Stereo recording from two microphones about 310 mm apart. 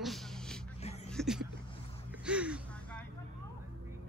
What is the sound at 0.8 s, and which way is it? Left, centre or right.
Music, centre.